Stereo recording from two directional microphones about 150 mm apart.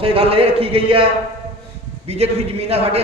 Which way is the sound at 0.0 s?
40° right (ahead or behind).